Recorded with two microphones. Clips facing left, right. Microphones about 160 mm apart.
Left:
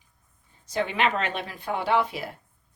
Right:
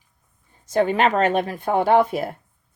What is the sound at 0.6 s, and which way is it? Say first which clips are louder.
Speech: right 7 dB; 45° right (ahead or behind).